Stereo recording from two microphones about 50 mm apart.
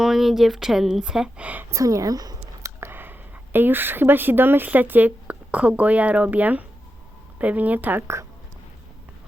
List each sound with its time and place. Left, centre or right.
0.0 s a woman's voice: centre
1.4 s speech: right
1.7 s speech: right
2.9 s speech: right
8.0 s a woman's voice: right